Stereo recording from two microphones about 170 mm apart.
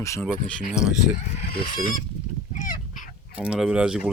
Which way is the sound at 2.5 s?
55° left (ahead or behind).